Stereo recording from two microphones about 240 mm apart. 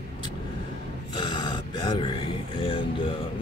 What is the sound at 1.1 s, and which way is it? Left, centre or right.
Speech, centre.